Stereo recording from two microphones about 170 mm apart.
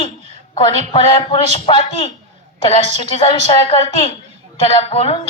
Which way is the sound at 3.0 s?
30° left (ahead or behind).